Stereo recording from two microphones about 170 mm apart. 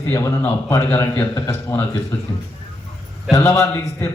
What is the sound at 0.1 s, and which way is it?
A man's voice, 15° left (ahead or behind).